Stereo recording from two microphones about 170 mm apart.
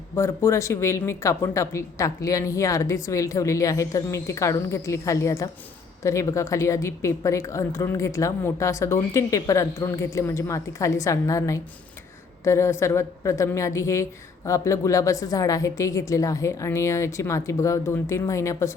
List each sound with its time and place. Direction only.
0.2 s a woman's voice: 15° left (ahead or behind)